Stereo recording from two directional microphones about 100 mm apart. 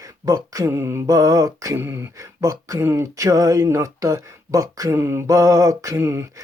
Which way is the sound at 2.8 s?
30° right (ahead or behind).